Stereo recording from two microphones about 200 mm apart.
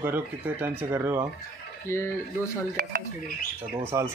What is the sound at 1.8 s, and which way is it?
Speech, 15° left (ahead or behind).